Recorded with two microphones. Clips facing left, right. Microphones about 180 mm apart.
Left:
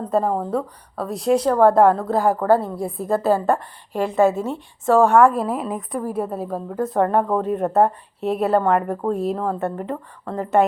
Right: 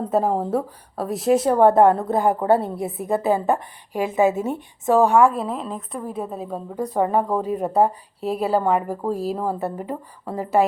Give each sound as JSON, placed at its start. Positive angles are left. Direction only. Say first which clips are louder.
{"t": 0.0, "sound": "a woman's voice", "louder": "even", "side_deg": -5}
{"t": 2.3, "sound": "a woman's voice", "louder": "left 1 dB", "side_deg": -25}
{"t": 5.3, "sound": "a woman's voice", "louder": "left 3 dB", "side_deg": 5}